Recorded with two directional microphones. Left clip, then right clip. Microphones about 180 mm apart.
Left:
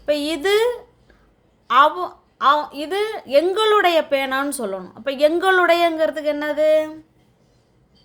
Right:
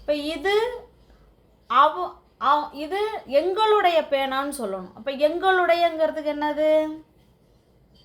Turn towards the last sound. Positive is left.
turn(degrees=50)  # may be behind; listen again after turning